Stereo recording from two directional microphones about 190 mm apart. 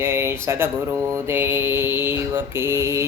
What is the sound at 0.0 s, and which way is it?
Speech, 10° right (ahead or behind).